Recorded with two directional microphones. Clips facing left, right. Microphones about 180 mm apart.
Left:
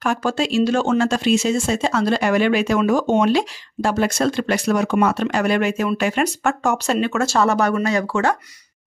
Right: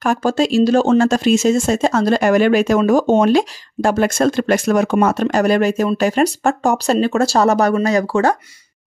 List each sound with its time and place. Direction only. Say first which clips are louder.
0.0 s speech: right 4 dB; 40° right (ahead or behind)